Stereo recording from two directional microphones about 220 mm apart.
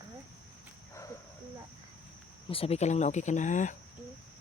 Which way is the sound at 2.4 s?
25° left (ahead or behind).